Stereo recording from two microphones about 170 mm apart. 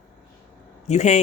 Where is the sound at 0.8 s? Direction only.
40° left (ahead or behind).